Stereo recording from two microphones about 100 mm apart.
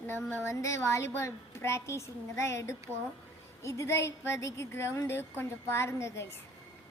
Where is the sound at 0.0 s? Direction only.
25° left (ahead or behind).